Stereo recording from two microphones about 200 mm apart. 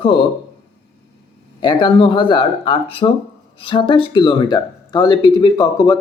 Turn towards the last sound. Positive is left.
turn(degrees=20)  # may be behind; listen again after turning